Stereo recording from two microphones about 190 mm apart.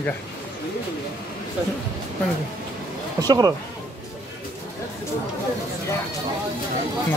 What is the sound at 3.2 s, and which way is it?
Speech, 20° right (ahead or behind).